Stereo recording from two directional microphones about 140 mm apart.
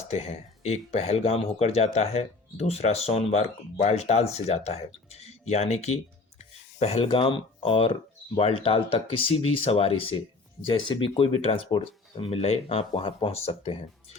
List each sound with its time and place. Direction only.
0.1 s speech: 50° left (ahead or behind)